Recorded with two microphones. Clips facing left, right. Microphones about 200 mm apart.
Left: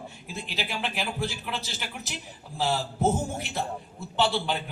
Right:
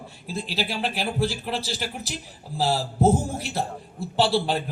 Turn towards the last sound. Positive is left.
turn(degrees=-35)  # may be behind; listen again after turning